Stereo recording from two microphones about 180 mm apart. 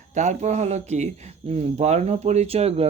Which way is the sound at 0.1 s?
40° right (ahead or behind).